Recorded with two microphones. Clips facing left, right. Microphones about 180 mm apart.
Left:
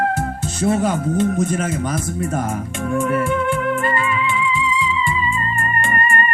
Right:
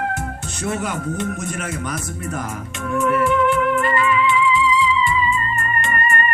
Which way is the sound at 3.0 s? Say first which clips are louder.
Right 4 dB; 40° left (ahead or behind).